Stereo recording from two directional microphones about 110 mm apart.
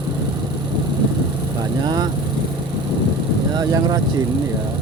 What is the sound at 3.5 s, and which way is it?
Speech, 35° right (ahead or behind).